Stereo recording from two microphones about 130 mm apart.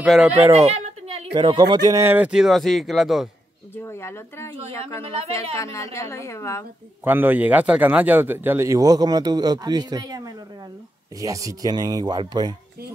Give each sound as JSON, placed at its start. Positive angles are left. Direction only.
{"t": 0.0, "sound": "speech", "side_deg": -5}
{"t": 0.6, "sound": "a sound", "side_deg": -55}
{"t": 1.4, "sound": "speech", "side_deg": -35}
{"t": 2.0, "sound": "speech", "side_deg": -15}
{"t": 3.7, "sound": "speech", "side_deg": 20}
{"t": 5.6, "sound": "speech", "side_deg": 25}
{"t": 7.1, "sound": "a man's voice", "side_deg": -15}